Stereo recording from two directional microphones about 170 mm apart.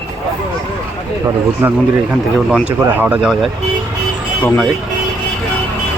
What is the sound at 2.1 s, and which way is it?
Speech, centre (ahead or behind).